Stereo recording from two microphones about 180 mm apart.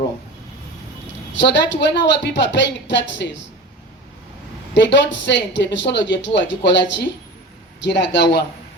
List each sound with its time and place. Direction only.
1.3 s a woman's voice: 90° left
4.7 s speech: 90° left
7.8 s speech: 80° left